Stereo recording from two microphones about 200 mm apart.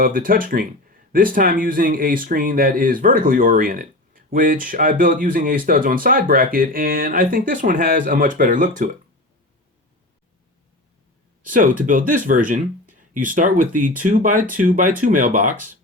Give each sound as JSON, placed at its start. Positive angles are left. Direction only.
{"t": 0.0, "sound": "speech", "side_deg": -45}
{"t": 11.4, "sound": "speech", "side_deg": -40}